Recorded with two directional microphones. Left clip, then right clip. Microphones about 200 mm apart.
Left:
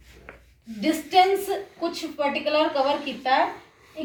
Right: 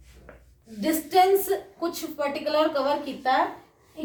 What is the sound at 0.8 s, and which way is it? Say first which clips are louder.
A woman's voice: left 1 dB; 15° right (ahead or behind).